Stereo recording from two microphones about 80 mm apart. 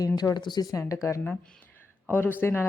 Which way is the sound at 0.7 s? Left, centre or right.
Left.